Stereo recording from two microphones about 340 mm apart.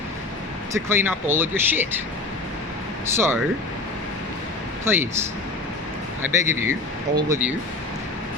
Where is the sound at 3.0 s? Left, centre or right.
Centre.